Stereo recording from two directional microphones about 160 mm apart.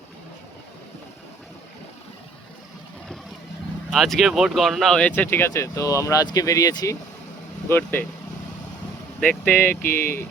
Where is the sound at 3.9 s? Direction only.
Centre (ahead or behind); by 6.9 s 25° left (ahead or behind).